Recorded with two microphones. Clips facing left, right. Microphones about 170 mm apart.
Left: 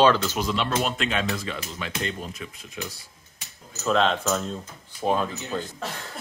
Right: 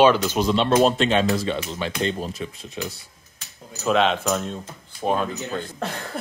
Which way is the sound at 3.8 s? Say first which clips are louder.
Right 2 dB; 10° right (ahead or behind).